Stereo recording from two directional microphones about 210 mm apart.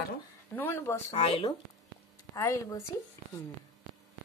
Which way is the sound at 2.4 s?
15° left (ahead or behind).